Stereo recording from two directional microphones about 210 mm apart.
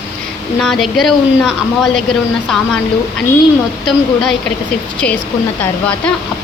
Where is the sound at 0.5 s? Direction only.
Centre (ahead or behind).